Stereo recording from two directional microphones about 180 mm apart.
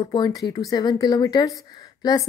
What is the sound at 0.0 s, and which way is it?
A woman's voice, 25° left (ahead or behind).